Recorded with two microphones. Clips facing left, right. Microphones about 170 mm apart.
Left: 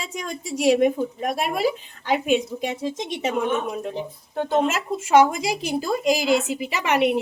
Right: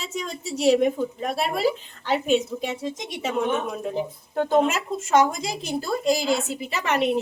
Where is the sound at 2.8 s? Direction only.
25° left (ahead or behind).